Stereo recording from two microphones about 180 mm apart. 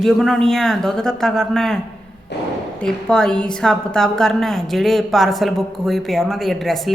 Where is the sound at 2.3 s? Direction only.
70° left (ahead or behind).